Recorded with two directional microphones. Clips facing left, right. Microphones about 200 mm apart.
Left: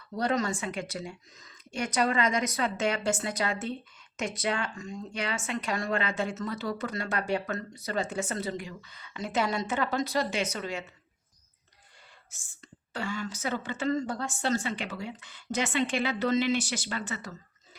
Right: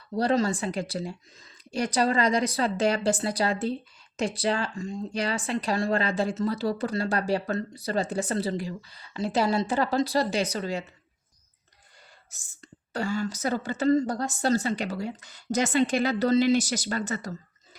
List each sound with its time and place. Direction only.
0.2 s a woman's voice: 30° right (ahead or behind)
12.3 s a woman's voice: 40° right (ahead or behind)